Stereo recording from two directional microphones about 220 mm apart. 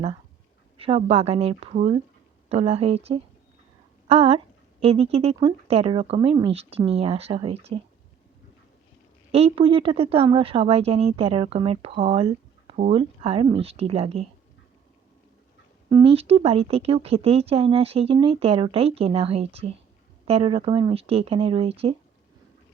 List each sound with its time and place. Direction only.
0.8 s speech: 25° right (ahead or behind)
9.3 s speech: 25° right (ahead or behind)
15.9 s speech: 25° right (ahead or behind)